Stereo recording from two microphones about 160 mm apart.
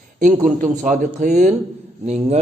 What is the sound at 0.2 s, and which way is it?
A man's voice, 55° right (ahead or behind).